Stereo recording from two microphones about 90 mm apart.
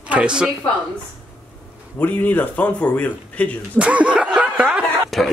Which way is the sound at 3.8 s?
15° right (ahead or behind).